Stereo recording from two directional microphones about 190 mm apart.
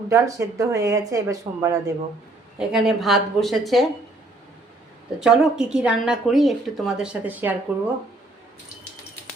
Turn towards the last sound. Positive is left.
turn(degrees=-10)  # may be behind; listen again after turning